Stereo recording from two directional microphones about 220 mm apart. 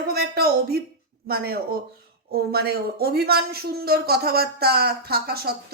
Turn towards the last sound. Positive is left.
turn(degrees=-45)  # may be behind; listen again after turning